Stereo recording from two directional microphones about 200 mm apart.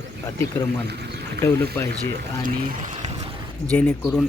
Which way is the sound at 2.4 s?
40° right (ahead or behind).